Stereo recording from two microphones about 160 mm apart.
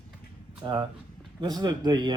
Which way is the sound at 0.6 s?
25° right (ahead or behind).